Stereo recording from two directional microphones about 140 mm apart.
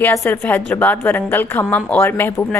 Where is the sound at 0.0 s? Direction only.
15° left (ahead or behind).